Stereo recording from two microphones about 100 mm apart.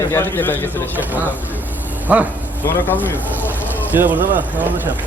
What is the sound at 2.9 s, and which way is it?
Speech, 20° left (ahead or behind).